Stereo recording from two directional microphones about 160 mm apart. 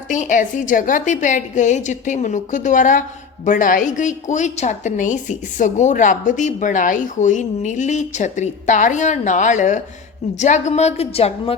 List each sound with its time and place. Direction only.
0.1 s a woman's voice: 55° left (ahead or behind)